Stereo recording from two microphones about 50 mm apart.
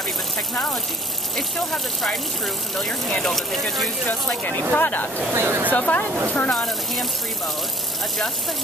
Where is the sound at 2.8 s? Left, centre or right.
Centre.